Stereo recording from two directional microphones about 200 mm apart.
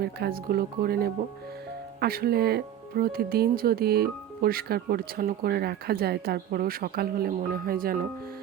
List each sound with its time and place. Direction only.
0.0 s speech: 50° right (ahead or behind)